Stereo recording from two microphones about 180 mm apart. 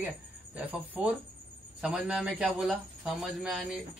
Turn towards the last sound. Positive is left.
turn(degrees=-5)  # may be behind; listen again after turning